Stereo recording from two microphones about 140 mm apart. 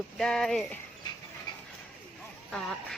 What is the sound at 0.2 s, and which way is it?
Speech, 5° left (ahead or behind).